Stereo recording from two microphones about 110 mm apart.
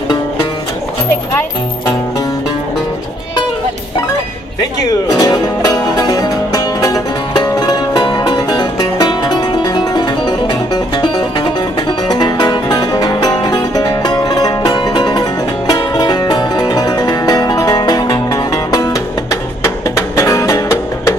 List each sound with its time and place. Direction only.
5.0 s music: 35° left (ahead or behind)